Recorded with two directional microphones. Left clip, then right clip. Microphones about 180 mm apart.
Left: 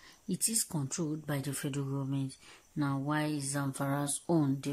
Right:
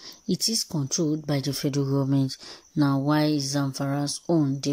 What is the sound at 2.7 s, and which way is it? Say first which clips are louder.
Speech: right 10 dB; 25° right (ahead or behind).